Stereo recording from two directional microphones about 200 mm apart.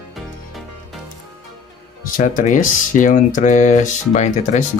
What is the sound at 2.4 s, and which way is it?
Speech, 40° left (ahead or behind).